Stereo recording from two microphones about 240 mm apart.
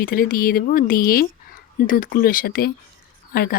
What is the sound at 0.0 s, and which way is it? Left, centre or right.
Speech, left.